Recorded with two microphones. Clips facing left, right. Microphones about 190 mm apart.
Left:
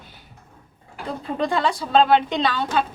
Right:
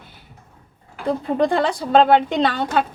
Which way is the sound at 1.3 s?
50° right (ahead or behind).